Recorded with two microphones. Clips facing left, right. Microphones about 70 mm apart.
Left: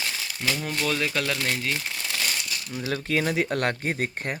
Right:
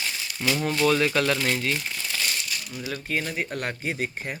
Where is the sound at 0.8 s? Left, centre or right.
Centre.